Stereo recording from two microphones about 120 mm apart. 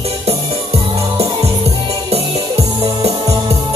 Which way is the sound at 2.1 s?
60° right (ahead or behind).